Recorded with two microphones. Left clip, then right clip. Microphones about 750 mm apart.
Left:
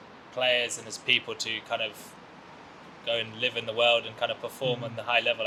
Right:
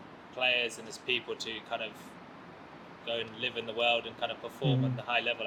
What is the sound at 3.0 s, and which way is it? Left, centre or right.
Speech, left.